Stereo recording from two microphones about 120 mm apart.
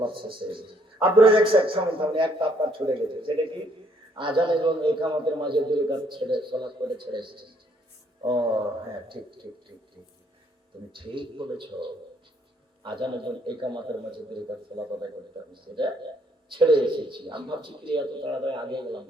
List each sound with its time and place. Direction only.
0.0 s a man's voice: 45° right (ahead or behind)
10.9 s a man's voice: 45° right (ahead or behind)
15.6 s a man's voice: 40° right (ahead or behind)